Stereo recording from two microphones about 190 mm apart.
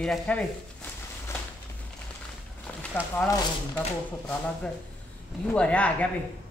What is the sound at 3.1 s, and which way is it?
Speech, 15° left (ahead or behind).